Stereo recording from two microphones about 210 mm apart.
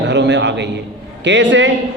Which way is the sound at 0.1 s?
55° right (ahead or behind).